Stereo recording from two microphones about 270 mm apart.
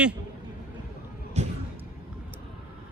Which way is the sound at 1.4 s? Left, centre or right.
Right.